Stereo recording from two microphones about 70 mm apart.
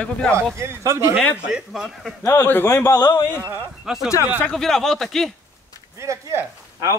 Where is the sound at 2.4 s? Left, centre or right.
Left.